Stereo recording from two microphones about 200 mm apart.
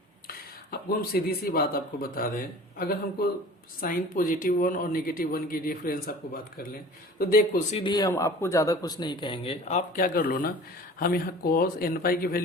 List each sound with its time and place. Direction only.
0.3 s speech: 50° left (ahead or behind)
7.8 s a man's voice: 20° left (ahead or behind); by 12.4 s 45° left (ahead or behind)